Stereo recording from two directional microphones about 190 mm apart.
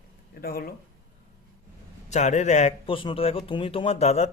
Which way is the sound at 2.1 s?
40° left (ahead or behind).